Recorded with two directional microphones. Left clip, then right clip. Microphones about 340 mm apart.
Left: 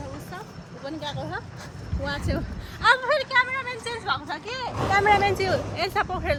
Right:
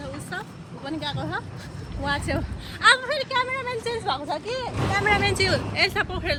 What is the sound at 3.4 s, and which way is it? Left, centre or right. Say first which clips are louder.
A woman's voice: left 2 dB; centre.